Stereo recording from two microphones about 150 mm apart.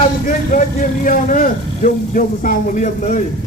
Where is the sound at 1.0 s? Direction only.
65° left (ahead or behind).